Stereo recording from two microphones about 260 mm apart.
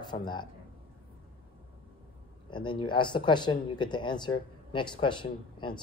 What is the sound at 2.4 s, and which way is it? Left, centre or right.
Speech, centre.